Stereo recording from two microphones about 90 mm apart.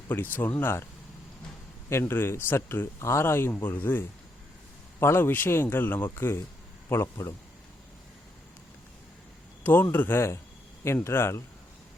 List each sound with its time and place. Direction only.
0.1 s speech: 20° left (ahead or behind)
1.9 s a man's voice: 25° left (ahead or behind)
9.9 s speech: 25° left (ahead or behind)